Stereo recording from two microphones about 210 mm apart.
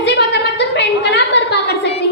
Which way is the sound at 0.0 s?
55° left (ahead or behind).